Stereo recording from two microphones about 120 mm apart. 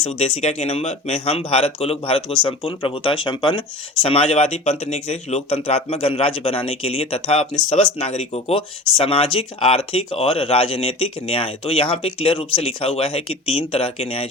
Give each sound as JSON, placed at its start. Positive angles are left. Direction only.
{"t": 0.0, "sound": "speech", "side_deg": 60}
{"t": 7.7, "sound": "speech", "side_deg": 65}